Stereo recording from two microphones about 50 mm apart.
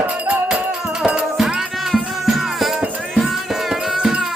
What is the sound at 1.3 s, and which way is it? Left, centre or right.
Music, centre.